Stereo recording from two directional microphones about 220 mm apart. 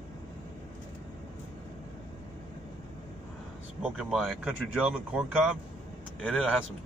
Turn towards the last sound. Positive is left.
turn(degrees=0)  # may be behind; listen again after turning